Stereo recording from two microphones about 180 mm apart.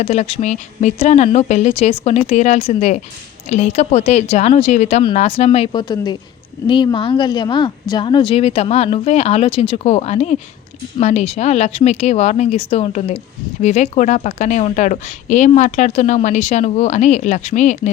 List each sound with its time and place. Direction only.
0.0 s a woman's voice: 35° left (ahead or behind)